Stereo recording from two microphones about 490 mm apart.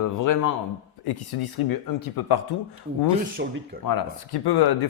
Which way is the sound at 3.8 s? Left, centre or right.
Left.